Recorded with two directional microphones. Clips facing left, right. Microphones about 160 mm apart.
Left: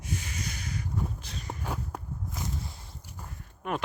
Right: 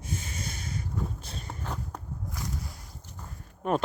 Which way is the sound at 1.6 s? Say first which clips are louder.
Left 1 dB; 10° left (ahead or behind).